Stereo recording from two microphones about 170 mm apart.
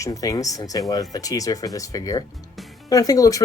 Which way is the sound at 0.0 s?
20° left (ahead or behind).